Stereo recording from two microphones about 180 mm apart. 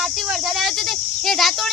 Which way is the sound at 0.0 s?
Centre (ahead or behind).